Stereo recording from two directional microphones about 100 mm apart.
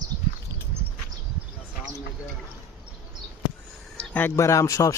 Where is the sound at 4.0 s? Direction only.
20° left (ahead or behind).